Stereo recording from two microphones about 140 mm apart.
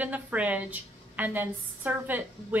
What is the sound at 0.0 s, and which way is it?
A woman's voice, 10° right (ahead or behind).